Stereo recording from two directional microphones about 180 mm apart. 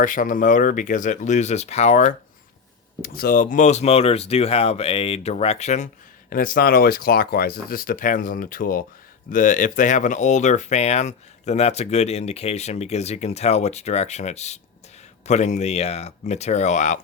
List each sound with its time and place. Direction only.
0.0 s speech: 45° left (ahead or behind)
3.0 s speech: 55° left (ahead or behind); by 5.9 s 40° left (ahead or behind)
6.3 s speech: 55° left (ahead or behind)